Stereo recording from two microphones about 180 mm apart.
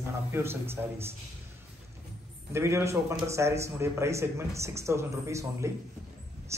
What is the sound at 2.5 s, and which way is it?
Speech, 15° right (ahead or behind).